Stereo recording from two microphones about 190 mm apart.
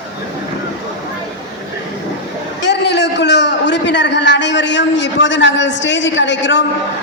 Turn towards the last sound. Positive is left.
turn(degrees=70)  # may be behind; listen again after turning